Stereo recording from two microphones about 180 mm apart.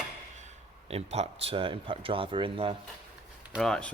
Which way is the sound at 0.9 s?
35° right (ahead or behind).